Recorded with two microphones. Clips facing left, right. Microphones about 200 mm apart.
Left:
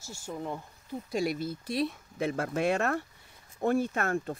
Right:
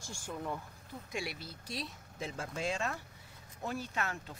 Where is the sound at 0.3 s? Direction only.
15° left (ahead or behind).